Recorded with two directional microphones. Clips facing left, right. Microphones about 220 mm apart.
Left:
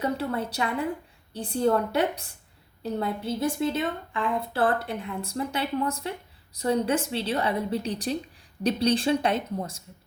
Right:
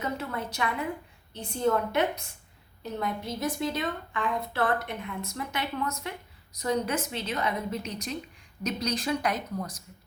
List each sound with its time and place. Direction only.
0.0 s a woman's voice: 30° left (ahead or behind)